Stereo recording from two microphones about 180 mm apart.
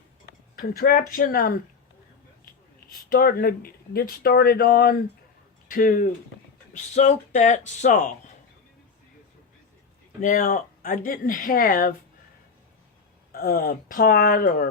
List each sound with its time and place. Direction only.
0.6 s speech: 60° left (ahead or behind)
3.1 s speech: 55° left (ahead or behind)
6.9 s speech: 40° left (ahead or behind)
10.2 s speech: 45° left (ahead or behind)
13.3 s speech: 55° left (ahead or behind)